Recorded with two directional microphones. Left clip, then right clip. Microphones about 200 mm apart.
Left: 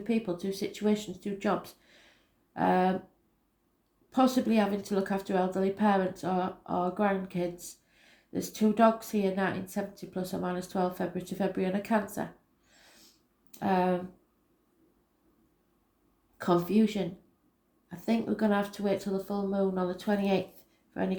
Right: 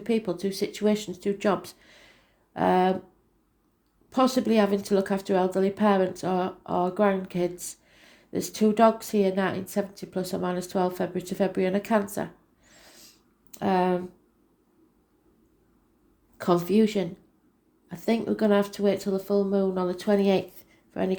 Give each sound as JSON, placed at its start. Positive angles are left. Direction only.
{"t": 0.0, "sound": "speech", "side_deg": -40}
{"t": 4.1, "sound": "speech", "side_deg": -40}
{"t": 16.4, "sound": "speech", "side_deg": -40}